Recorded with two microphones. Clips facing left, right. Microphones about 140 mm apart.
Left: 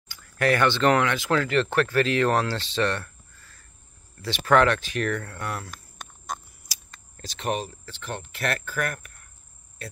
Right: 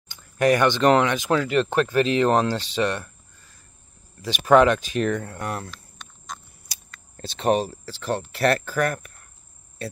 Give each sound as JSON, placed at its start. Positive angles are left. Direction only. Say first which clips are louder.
{"t": 0.1, "sound": "speech", "louder": "right 4 dB", "side_deg": -15}
{"t": 5.7, "sound": "a sound", "louder": "even", "side_deg": 50}
{"t": 7.2, "sound": "speech", "louder": "right 7 dB", "side_deg": -30}